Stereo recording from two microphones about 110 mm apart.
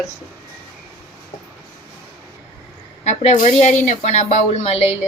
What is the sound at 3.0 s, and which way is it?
Speech, 90° left.